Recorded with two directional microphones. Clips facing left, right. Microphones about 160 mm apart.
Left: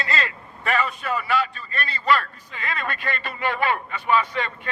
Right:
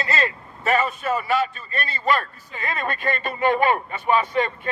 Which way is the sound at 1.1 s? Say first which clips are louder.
Right 1 dB; 45° right (ahead or behind).